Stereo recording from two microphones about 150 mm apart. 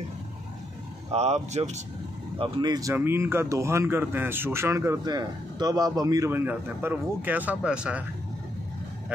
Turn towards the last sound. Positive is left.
turn(degrees=-5)  # may be behind; listen again after turning